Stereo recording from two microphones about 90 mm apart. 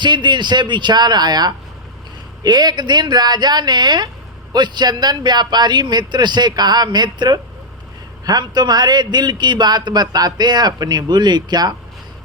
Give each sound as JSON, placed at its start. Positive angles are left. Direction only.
{"t": 0.0, "sound": "a man's voice", "side_deg": -55}